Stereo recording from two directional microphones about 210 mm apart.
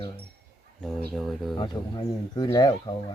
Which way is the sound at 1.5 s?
20° left (ahead or behind).